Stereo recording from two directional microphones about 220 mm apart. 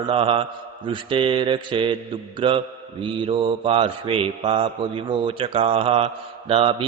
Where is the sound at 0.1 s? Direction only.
25° right (ahead or behind).